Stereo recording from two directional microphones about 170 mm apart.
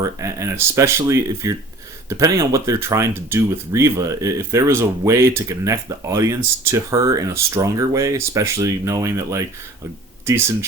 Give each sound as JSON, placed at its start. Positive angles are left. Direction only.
{"t": 0.0, "sound": "speech", "side_deg": -15}